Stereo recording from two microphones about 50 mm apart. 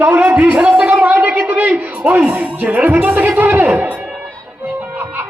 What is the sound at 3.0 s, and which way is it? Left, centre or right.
Music, right.